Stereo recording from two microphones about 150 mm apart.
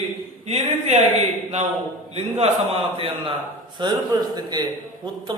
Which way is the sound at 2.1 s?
40° right (ahead or behind).